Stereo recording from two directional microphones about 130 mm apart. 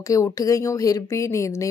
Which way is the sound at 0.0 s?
25° left (ahead or behind).